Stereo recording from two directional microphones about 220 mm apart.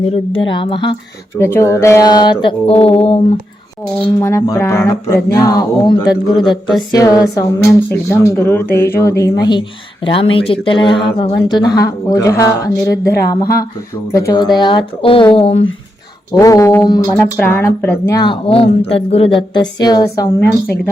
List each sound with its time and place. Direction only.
0.1 s a woman's voice: 25° left (ahead or behind)
1.4 s a woman's voice: 10° left (ahead or behind); by 3.2 s 25° left (ahead or behind)
4.2 s speech: 10° left (ahead or behind)
6.4 s a sound: centre (ahead or behind)
6.9 s a woman's voice: 15° left (ahead or behind)
16.3 s a woman's voice: 15° left (ahead or behind)